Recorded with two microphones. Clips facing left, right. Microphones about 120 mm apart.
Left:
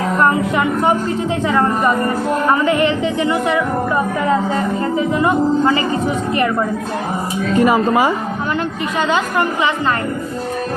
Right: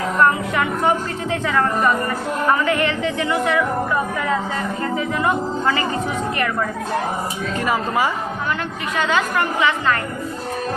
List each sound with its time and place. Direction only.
0.2 s speech: 20° left (ahead or behind)
7.6 s speech: 20° left (ahead or behind)